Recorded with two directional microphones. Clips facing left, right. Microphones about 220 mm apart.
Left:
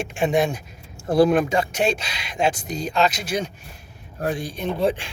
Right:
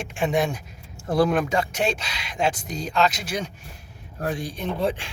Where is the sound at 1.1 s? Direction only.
10° left (ahead or behind).